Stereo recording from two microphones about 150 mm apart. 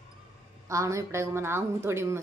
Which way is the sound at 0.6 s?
20° right (ahead or behind).